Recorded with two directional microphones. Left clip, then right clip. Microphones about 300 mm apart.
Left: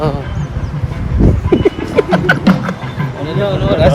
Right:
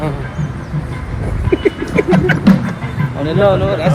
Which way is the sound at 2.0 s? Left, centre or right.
Centre.